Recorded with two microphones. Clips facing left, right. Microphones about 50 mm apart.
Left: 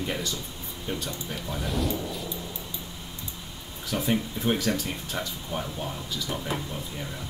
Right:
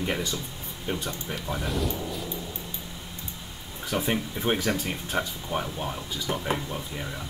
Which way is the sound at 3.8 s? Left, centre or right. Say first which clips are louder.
Even; right.